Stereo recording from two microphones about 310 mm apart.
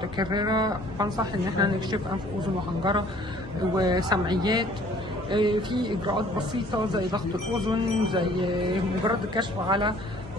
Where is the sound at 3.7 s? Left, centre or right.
Centre.